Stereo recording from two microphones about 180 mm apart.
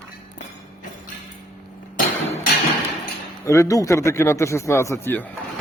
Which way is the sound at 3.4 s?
15° left (ahead or behind).